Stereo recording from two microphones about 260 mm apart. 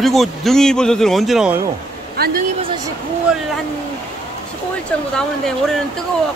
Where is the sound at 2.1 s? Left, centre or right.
Right.